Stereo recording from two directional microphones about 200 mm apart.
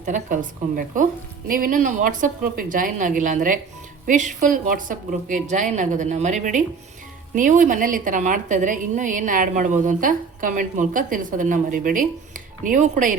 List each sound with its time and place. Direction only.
0.0 s a woman's voice: 40° right (ahead or behind)
1.5 s a woman's voice: 45° right (ahead or behind)